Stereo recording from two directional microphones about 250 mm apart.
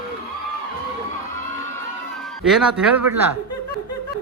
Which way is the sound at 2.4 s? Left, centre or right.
Centre.